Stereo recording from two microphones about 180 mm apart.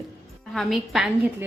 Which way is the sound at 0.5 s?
Centre (ahead or behind).